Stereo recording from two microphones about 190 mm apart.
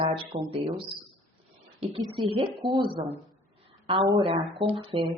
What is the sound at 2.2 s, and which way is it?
Speech, 30° right (ahead or behind).